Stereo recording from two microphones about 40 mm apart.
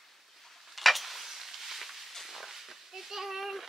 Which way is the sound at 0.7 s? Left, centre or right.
Centre.